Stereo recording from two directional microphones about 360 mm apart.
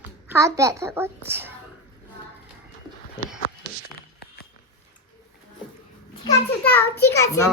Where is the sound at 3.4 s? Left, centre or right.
Left.